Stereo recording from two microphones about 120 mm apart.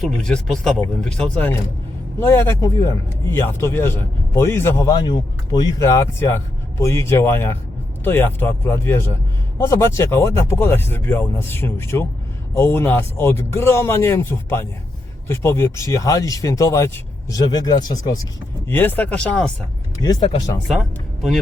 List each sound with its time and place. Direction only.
0.0 s speech: 5° left (ahead or behind)
2.1 s speech: 20° left (ahead or behind)
4.9 s speech: 35° left (ahead or behind)
5.8 s speech: 25° left (ahead or behind)
18.7 s speech: 15° left (ahead or behind)
20.0 s speech: 35° left (ahead or behind)
20.7 s speech: centre (ahead or behind)